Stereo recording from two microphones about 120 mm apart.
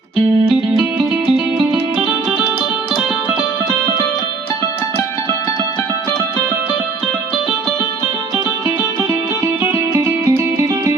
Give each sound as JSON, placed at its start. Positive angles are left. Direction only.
{"t": 0.4, "sound": "music", "side_deg": -5}
{"t": 9.9, "sound": "music", "side_deg": -25}